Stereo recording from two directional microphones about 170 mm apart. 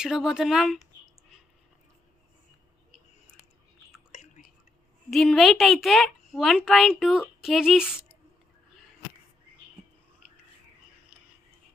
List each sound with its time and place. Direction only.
0.0 s a woman's voice: 5° right (ahead or behind)
4.1 s whispering: 45° left (ahead or behind)
5.1 s a woman's voice: centre (ahead or behind)
11.1 s a sound: 10° right (ahead or behind)